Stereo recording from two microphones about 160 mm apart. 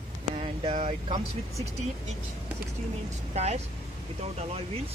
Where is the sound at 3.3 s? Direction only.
40° right (ahead or behind).